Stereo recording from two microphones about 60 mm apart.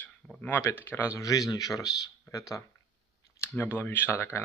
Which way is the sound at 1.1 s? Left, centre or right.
Left.